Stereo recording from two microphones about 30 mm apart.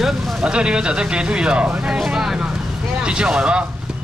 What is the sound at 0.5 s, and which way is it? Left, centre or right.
Speech, right.